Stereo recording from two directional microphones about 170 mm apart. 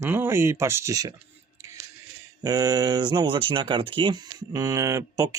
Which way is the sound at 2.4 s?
20° right (ahead or behind).